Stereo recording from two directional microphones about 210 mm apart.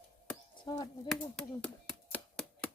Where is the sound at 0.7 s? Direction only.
20° left (ahead or behind).